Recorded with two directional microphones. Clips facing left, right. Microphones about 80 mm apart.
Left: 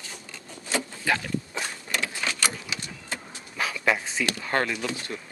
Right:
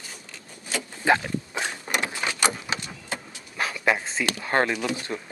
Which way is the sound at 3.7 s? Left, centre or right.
Centre.